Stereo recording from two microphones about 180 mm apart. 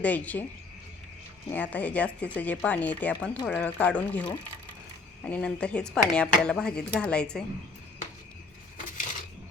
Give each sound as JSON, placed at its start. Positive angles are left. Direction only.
{"t": 0.0, "sound": "speech", "side_deg": 10}
{"t": 1.5, "sound": "speech", "side_deg": 10}